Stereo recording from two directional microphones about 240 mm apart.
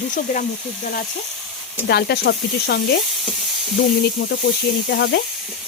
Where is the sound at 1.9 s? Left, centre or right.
Left.